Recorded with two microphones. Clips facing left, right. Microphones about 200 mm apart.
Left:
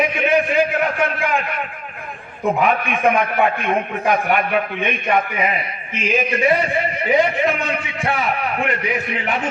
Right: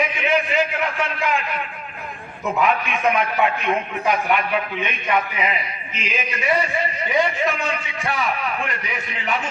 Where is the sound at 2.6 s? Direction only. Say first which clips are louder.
Left 1 dB; 50° left (ahead or behind).